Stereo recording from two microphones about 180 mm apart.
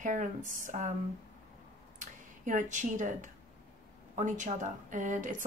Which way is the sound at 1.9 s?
45° right (ahead or behind).